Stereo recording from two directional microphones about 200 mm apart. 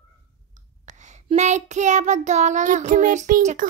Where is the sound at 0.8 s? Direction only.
35° right (ahead or behind).